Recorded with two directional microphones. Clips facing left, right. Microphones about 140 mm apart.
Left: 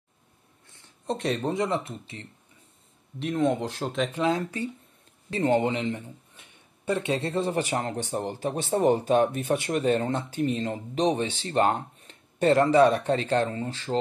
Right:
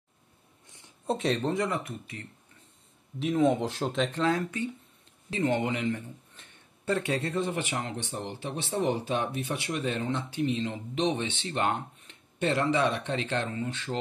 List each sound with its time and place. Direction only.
0.7 s a sound: 15° right (ahead or behind)
1.1 s speech: centre (ahead or behind)
1.4 s speech: 20° left (ahead or behind)
3.2 s speech: centre (ahead or behind)
4.1 s speech: 15° left (ahead or behind)
4.4 s speech: 35° left (ahead or behind)